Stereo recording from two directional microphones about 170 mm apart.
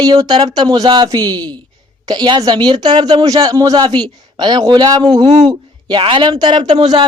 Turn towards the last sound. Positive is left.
turn(degrees=-25)  # may be behind; listen again after turning